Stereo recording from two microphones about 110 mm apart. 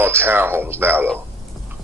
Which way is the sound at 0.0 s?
20° right (ahead or behind).